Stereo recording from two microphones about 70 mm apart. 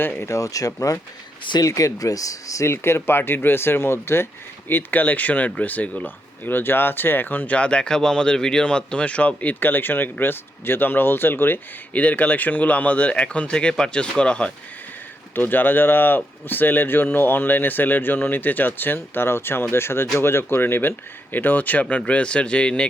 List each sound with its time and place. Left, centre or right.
0.0 s speech: left
0.3 s speech: left
2.7 s speech: left
4.7 s speech: left
15.4 s speech: left